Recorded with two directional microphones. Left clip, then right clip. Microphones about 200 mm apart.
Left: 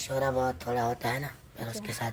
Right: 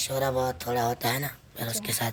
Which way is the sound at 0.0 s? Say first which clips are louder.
Right 1 dB; 55° right (ahead or behind).